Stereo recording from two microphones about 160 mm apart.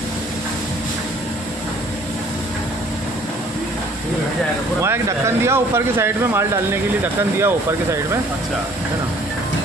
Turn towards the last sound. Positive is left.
turn(degrees=-15)  # may be behind; listen again after turning